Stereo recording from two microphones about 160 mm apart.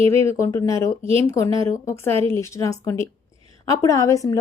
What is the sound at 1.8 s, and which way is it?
A woman's voice, 20° left (ahead or behind).